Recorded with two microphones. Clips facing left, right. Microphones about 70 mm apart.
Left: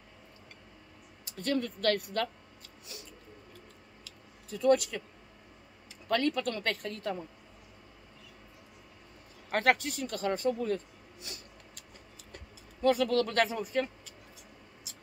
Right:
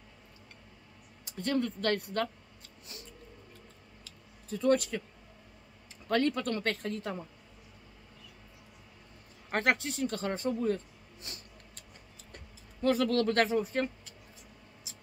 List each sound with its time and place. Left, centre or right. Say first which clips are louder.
1.4 s speech: left 1 dB; right
4.0 s a sound: left 1 dB; right
6.1 s a woman's voice: right 1 dB; right
9.5 s speech: left 2 dB; right
12.9 s a woman's voice: right 3 dB; right